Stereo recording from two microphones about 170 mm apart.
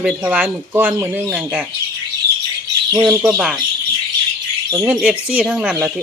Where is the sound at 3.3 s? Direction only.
5° right (ahead or behind).